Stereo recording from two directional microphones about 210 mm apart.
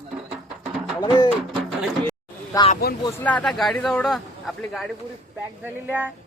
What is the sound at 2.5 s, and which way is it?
Speech, 15° left (ahead or behind).